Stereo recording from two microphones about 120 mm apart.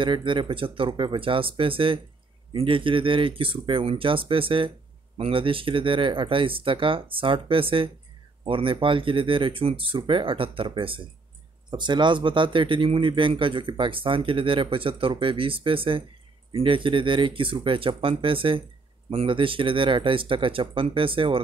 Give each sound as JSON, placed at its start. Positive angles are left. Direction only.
{"t": 0.0, "sound": "speech", "side_deg": -45}